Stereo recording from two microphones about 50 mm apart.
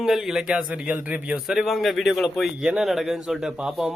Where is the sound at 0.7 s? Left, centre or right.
Right.